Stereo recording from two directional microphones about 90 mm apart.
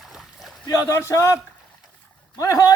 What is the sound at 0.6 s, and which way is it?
Speech, 35° left (ahead or behind).